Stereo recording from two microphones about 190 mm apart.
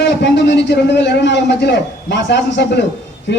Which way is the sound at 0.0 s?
65° left (ahead or behind).